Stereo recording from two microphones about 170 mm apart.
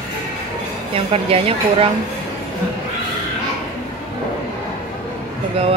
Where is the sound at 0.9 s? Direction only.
35° right (ahead or behind).